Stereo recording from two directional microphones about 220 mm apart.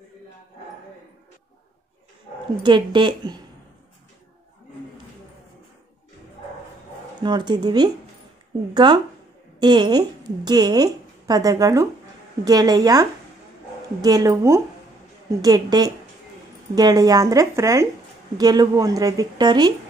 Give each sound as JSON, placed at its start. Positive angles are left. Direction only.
{"t": 2.6, "sound": "speech", "side_deg": -20}
{"t": 7.2, "sound": "a woman's voice", "side_deg": -20}